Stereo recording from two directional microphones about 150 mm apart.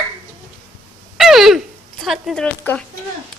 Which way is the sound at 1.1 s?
Centre (ahead or behind).